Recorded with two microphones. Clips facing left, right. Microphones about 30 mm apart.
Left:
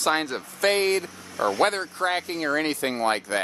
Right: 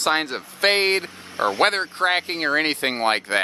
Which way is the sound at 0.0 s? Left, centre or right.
Right.